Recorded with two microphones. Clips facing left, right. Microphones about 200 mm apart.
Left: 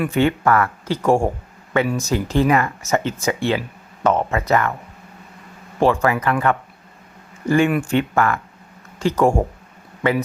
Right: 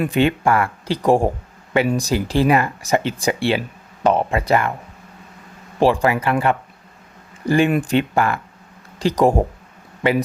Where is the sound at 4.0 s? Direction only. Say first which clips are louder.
Right 1 dB; 15° right (ahead or behind).